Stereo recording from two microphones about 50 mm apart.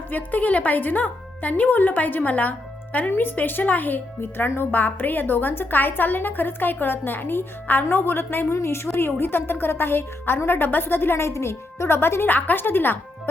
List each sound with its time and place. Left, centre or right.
0.1 s a woman's voice: left
3.1 s a woman's voice: left
8.5 s a woman's voice: left
11.3 s speech: left
12.3 s a woman's voice: left